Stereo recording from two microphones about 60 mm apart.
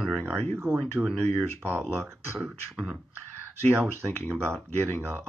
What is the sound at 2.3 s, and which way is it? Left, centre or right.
Beatboxing, centre.